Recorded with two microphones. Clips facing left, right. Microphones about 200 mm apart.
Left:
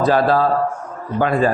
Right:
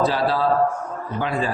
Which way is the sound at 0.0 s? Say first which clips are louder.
Left 5 dB; 50° left (ahead or behind).